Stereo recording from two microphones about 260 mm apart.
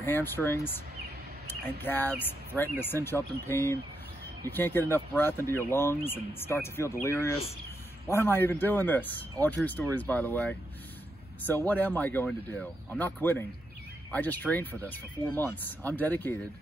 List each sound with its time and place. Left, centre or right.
0.0 s a man's voice: centre
1.8 s a man's voice: centre